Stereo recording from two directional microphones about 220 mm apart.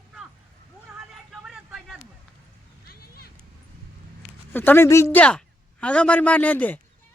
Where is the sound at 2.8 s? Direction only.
45° left (ahead or behind).